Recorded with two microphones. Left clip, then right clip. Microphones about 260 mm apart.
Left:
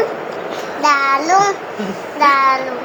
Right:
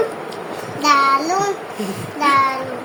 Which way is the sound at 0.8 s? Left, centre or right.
Centre.